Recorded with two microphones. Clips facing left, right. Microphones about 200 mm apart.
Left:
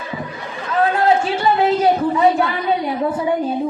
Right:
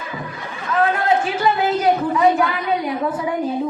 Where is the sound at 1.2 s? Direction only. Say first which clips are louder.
Left 2 dB; 30° left (ahead or behind).